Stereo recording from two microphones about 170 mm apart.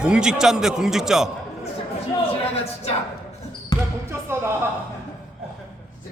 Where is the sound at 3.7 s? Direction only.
25° left (ahead or behind).